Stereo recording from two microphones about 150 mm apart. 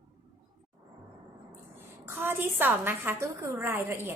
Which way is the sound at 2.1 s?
15° right (ahead or behind).